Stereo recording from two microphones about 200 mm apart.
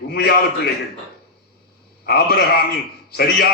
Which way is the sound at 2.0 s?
50° left (ahead or behind).